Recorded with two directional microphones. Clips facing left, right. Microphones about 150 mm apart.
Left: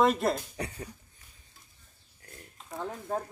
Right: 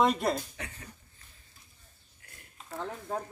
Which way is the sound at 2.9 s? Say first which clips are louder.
Left 3 dB; 5° left (ahead or behind).